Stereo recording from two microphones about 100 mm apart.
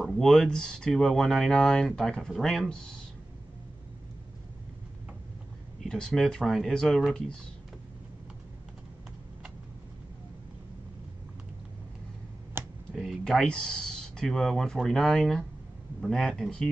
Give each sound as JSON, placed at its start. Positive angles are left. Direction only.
{"t": 0.0, "sound": "speech", "side_deg": 0}
{"t": 5.9, "sound": "speech", "side_deg": 5}
{"t": 12.6, "sound": "a sound", "side_deg": -25}
{"t": 12.9, "sound": "speech", "side_deg": 5}